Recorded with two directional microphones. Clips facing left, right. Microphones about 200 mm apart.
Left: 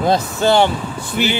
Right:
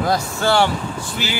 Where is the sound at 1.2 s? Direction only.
60° left (ahead or behind).